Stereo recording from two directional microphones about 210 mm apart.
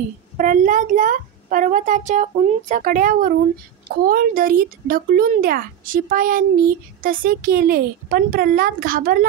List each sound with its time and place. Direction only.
0.4 s a child's voice: 40° right (ahead or behind)